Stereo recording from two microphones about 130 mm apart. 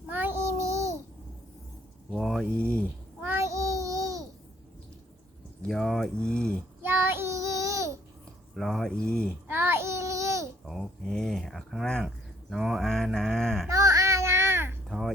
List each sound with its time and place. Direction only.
0.1 s child singing: 15° right (ahead or behind)
2.0 s speech: 5° right (ahead or behind)
3.2 s child singing: 20° right (ahead or behind)
5.6 s speech: centre (ahead or behind)
6.8 s child singing: 15° right (ahead or behind)
8.5 s speech: centre (ahead or behind)
9.5 s babbling: 15° right (ahead or behind)
10.7 s speech: centre (ahead or behind)
13.7 s a sound: 25° right (ahead or behind)
14.8 s a sound: centre (ahead or behind)